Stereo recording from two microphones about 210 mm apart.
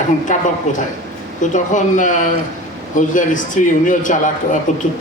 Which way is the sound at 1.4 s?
35° left (ahead or behind).